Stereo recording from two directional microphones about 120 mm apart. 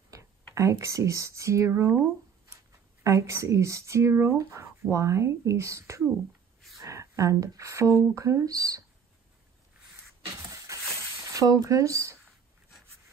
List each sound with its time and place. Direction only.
0.6 s speech: 25° right (ahead or behind)
10.4 s a sound: 25° right (ahead or behind)
11.3 s speech: 30° right (ahead or behind)